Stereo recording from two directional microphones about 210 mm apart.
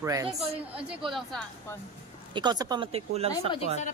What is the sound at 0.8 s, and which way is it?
Speech, centre (ahead or behind).